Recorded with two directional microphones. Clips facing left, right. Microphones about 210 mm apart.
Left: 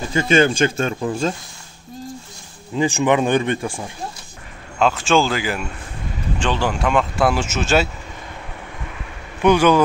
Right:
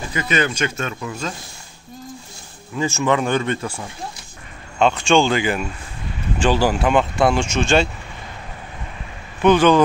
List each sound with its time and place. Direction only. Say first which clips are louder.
0.1 s speech: left 6 dB; 30° left (ahead or behind)
2.7 s speech: left 2 dB; 20° left (ahead or behind)
4.7 s speech: right 1 dB; centre (ahead or behind)
9.4 s speech: right 1 dB; 10° left (ahead or behind)